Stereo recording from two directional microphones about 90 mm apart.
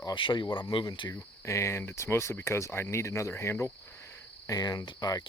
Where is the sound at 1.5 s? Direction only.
30° left (ahead or behind).